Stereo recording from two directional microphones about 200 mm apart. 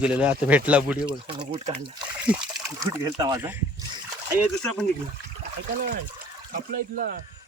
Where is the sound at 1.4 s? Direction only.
25° right (ahead or behind).